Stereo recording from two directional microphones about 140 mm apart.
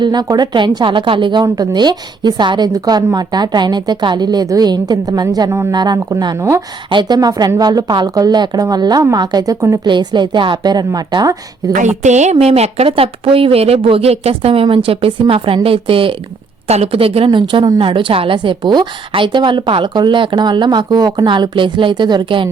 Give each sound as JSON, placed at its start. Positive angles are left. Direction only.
{"t": 0.0, "sound": "a woman's voice", "side_deg": -30}
{"t": 11.7, "sound": "a woman's voice", "side_deg": -60}